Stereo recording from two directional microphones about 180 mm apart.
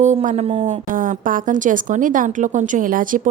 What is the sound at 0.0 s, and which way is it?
A woman's voice, 40° right (ahead or behind).